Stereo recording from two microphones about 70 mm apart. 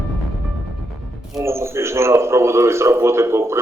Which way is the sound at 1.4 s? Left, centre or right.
Right.